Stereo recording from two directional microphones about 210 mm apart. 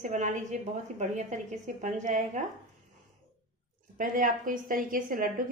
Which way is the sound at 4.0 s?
40° right (ahead or behind).